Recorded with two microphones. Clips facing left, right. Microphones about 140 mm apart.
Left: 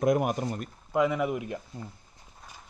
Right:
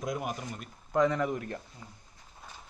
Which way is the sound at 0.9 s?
10° left (ahead or behind).